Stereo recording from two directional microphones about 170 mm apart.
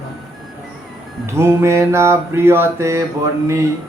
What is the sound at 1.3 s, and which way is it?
Mantra, 15° right (ahead or behind).